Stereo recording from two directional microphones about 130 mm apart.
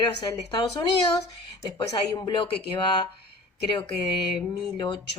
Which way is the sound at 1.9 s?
35° left (ahead or behind).